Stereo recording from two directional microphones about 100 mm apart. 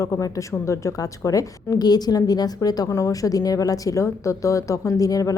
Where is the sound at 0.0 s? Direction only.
35° left (ahead or behind).